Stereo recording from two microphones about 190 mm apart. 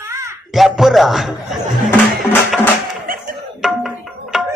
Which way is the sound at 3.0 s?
45° right (ahead or behind).